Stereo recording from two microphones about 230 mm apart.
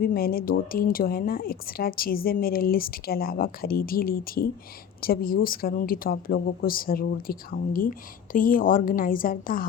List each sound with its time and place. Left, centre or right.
0.0 s speech: left